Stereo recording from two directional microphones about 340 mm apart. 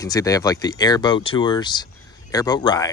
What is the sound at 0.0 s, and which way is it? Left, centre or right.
Speech, centre.